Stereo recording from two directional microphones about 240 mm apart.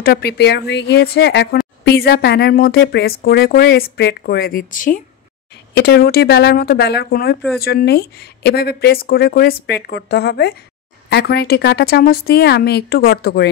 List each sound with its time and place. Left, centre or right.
0.0 s a woman's voice: left